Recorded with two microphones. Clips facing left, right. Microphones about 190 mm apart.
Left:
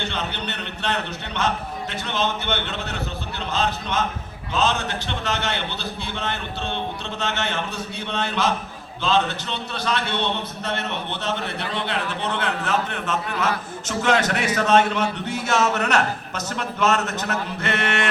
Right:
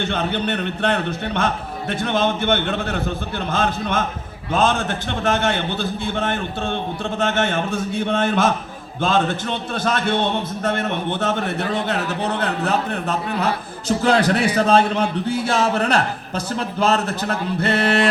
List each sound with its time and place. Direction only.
0.0 s a man's voice: 50° right (ahead or behind); by 18.1 s 35° right (ahead or behind)